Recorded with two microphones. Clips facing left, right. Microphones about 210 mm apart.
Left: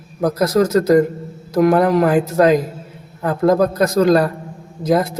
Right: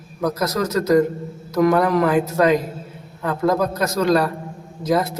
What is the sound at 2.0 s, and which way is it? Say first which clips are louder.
A man's voice: left 3 dB; 45° left (ahead or behind).